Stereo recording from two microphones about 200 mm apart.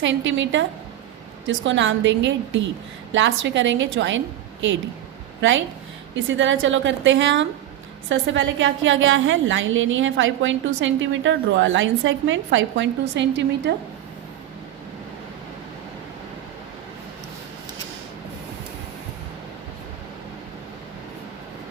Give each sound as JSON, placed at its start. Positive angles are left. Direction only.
{"t": 0.0, "sound": "a woman's voice", "side_deg": -65}
{"t": 5.4, "sound": "a woman's voice", "side_deg": -70}